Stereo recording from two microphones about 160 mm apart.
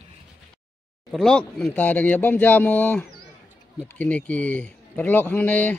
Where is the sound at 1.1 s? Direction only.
5° left (ahead or behind).